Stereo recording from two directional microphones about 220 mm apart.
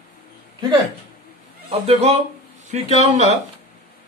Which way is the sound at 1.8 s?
30° right (ahead or behind).